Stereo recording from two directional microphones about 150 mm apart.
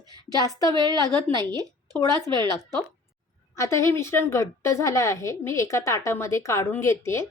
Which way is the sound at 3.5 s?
20° left (ahead or behind).